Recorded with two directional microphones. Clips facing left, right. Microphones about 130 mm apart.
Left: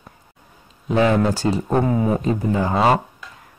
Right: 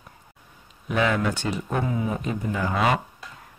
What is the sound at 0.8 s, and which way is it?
Speech, 30° left (ahead or behind).